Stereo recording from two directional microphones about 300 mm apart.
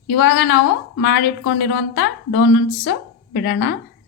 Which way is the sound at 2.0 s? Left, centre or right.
Left.